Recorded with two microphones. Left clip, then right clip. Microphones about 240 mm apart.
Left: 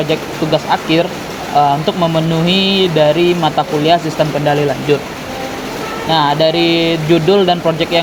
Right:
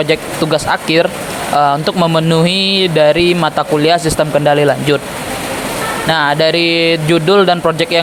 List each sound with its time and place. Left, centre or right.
0.1 s speech: right
6.1 s speech: right